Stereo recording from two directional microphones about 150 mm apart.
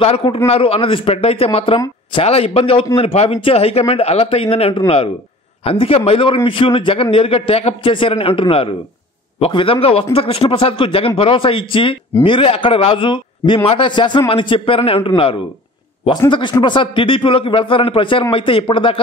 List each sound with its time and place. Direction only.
0.0 s a man's voice: 40° left (ahead or behind)